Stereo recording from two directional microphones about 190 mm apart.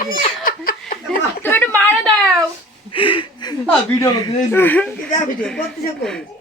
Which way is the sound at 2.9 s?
25° left (ahead or behind).